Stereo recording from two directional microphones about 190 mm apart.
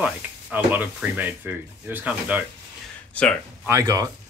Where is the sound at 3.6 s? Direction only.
15° right (ahead or behind).